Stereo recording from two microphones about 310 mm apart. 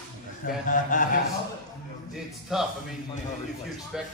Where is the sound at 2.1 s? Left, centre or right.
Centre.